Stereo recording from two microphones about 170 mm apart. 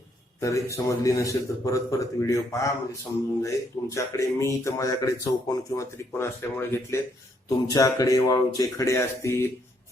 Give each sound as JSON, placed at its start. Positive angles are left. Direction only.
{"t": 0.3, "sound": "speech", "side_deg": 20}